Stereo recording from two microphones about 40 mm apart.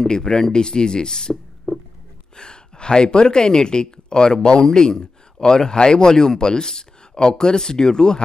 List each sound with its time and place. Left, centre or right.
0.0 s speech: centre
2.3 s speech: left